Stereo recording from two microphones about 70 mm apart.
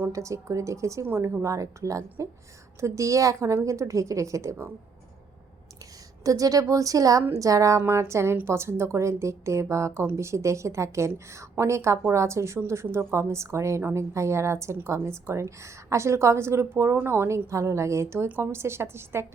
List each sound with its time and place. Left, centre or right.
0.1 s a woman's voice: right
6.2 s a woman's voice: right
7.8 s a woman's voice: right